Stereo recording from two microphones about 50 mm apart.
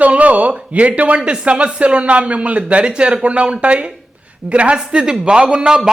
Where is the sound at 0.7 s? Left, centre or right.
Right.